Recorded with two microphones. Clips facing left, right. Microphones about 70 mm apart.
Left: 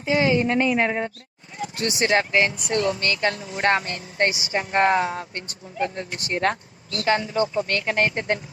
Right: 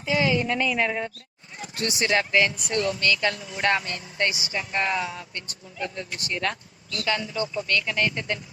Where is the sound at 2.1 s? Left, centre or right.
Left.